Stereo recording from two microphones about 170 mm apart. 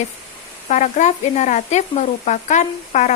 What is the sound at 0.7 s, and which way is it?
Speech, 45° left (ahead or behind).